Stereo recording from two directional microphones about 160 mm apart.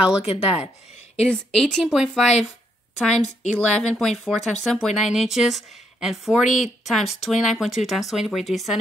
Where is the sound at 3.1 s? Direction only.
45° left (ahead or behind).